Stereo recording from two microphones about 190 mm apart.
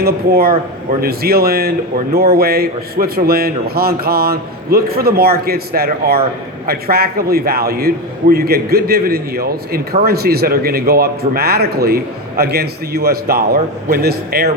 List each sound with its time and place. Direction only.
0.0 s a man's voice: 55° right (ahead or behind)